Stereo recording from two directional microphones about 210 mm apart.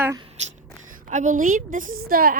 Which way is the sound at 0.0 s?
15° right (ahead or behind).